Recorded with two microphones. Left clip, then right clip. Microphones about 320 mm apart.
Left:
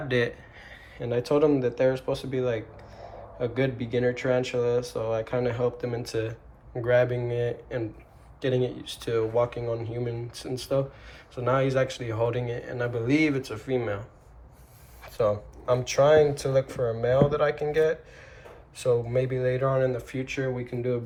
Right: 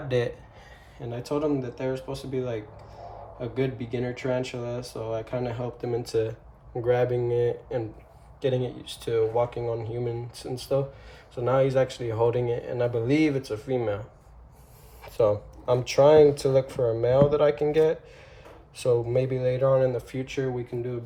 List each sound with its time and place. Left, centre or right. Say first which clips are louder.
0.1 s speech: even; centre
15.0 s speech: right 2 dB; centre